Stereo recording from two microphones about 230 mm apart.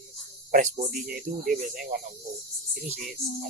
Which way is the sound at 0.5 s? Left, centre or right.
Right.